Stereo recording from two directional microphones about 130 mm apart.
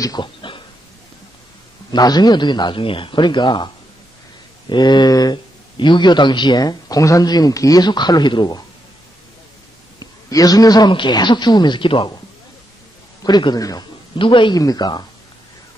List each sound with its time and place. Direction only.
0.0 s a sound: 35° left (ahead or behind)
1.9 s a man's voice: 30° left (ahead or behind)
9.9 s a man's voice: 30° left (ahead or behind)
13.2 s a man's voice: 35° left (ahead or behind)
14.1 s a man's voice: 40° left (ahead or behind)